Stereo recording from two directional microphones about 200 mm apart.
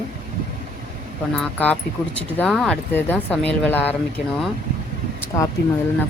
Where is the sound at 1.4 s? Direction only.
10° left (ahead or behind).